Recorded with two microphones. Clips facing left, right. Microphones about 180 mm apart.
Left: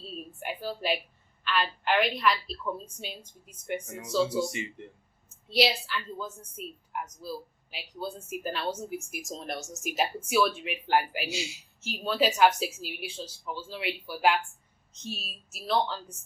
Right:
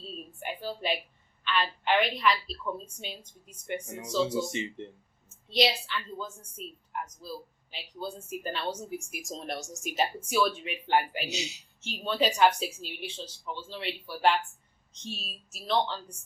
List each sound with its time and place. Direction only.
0.3 s a woman's voice: 5° left (ahead or behind)
4.4 s speech: 25° right (ahead or behind)
5.5 s speech: 5° left (ahead or behind)
11.3 s speech: 20° right (ahead or behind)
11.8 s speech: 5° left (ahead or behind)